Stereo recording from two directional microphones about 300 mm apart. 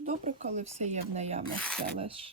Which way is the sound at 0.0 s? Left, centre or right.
Right.